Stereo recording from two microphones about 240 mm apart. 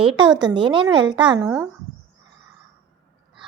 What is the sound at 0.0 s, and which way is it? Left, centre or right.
A child's voice, right.